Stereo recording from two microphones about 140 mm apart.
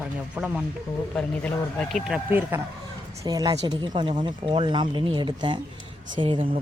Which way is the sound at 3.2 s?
30° right (ahead or behind).